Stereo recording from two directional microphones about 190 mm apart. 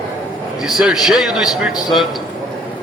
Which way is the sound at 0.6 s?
Centre (ahead or behind).